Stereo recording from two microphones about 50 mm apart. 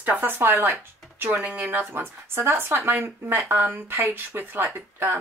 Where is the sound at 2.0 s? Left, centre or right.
Right.